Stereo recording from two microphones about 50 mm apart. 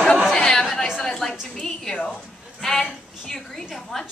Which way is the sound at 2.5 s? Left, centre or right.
Centre.